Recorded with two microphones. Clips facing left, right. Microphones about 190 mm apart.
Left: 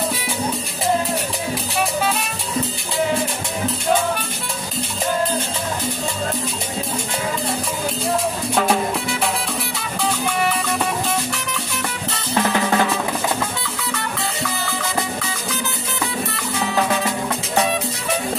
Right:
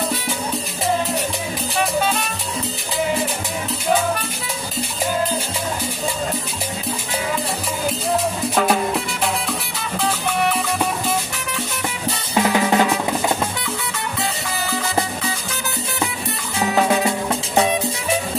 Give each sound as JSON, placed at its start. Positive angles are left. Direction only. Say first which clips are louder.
{"t": 10.0, "sound": "music", "louder": "even", "side_deg": 0}
{"t": 12.4, "sound": "drum", "louder": "right 2 dB", "side_deg": -15}
{"t": 16.7, "sound": "music", "louder": "right 3 dB", "side_deg": -15}